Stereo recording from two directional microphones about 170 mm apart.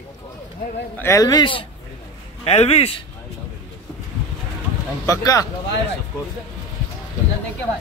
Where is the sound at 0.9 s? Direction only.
15° left (ahead or behind); by 2.9 s 40° left (ahead or behind).